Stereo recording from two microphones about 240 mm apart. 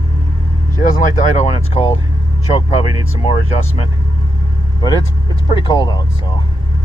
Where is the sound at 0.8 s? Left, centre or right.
Left.